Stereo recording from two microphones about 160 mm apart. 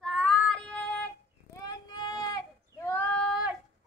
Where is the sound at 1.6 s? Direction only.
20° left (ahead or behind).